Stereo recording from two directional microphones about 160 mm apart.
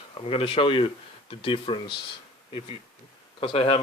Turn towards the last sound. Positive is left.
turn(degrees=35)  # may be behind; listen again after turning